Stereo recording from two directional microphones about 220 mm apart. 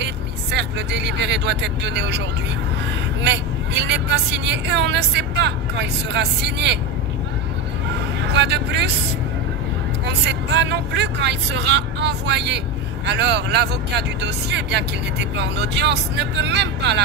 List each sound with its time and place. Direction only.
0.0 s speech: 50° right (ahead or behind)
8.2 s speech: 55° right (ahead or behind)
10.0 s speech: 50° right (ahead or behind)